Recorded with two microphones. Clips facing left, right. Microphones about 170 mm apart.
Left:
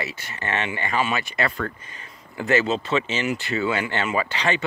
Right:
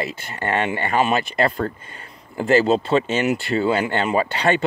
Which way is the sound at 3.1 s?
55° right (ahead or behind).